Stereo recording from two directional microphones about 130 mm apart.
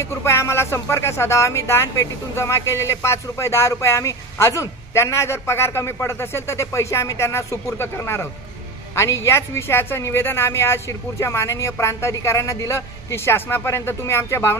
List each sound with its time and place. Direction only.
0.0 s speech: 20° left (ahead or behind)